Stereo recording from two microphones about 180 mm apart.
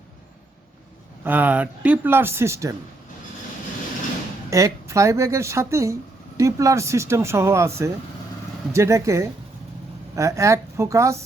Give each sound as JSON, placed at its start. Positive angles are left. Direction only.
{"t": 1.2, "sound": "speech", "side_deg": -10}
{"t": 4.4, "sound": "speech", "side_deg": -15}